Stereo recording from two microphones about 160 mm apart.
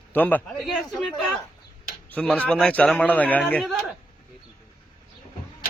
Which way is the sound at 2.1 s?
10° left (ahead or behind).